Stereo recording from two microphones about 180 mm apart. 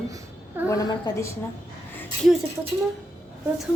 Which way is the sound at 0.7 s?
20° left (ahead or behind).